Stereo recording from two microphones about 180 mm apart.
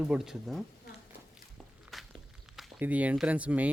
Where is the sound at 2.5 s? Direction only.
10° right (ahead or behind).